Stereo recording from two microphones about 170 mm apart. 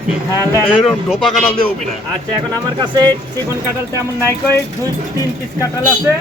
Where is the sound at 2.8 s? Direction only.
25° right (ahead or behind).